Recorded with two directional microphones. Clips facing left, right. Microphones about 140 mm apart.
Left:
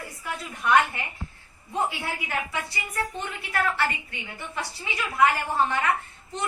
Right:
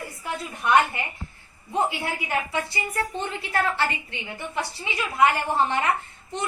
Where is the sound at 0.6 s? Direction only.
25° right (ahead or behind).